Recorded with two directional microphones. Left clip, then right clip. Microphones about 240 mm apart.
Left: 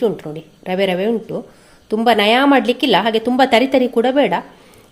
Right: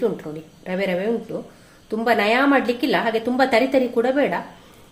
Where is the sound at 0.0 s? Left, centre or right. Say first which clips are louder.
Left 5 dB; left.